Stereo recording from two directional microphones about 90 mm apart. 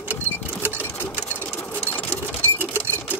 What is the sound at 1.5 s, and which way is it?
Sewing machine, 25° left (ahead or behind).